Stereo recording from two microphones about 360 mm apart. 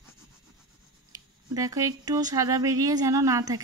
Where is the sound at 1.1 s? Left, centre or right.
Centre.